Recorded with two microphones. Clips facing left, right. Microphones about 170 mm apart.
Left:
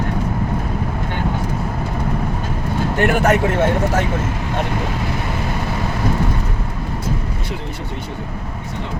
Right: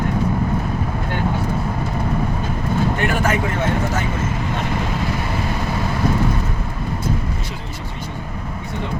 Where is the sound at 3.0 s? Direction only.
65° left (ahead or behind).